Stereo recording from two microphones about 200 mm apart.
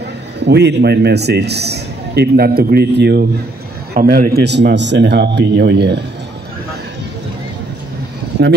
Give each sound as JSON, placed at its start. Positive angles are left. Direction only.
{"t": 0.5, "sound": "a man's voice", "side_deg": -60}